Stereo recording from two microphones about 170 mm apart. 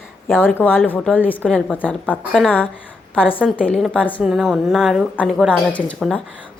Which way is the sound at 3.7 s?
5° left (ahead or behind).